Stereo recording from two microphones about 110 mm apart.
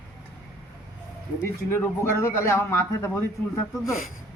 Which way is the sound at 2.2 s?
25° left (ahead or behind).